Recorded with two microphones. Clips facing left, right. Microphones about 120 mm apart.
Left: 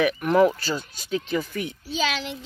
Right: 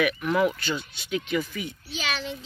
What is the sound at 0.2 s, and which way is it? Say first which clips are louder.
Speech: left 5 dB; 40° left (ahead or behind).